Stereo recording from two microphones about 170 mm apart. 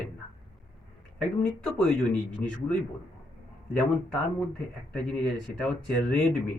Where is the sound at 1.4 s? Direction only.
5° left (ahead or behind).